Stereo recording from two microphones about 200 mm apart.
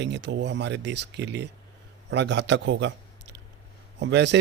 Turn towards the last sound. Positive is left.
turn(degrees=-60)  # may be behind; listen again after turning